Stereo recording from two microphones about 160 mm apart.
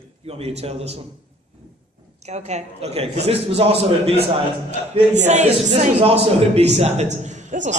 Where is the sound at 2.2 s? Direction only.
45° right (ahead or behind).